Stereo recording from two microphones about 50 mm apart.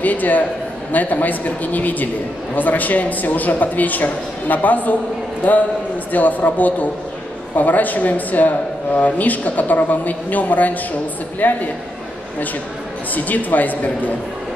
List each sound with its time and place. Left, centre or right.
0.0 s speech: left
13.1 s speech: left